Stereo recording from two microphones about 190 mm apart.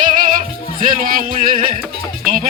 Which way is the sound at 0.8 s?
45° right (ahead or behind).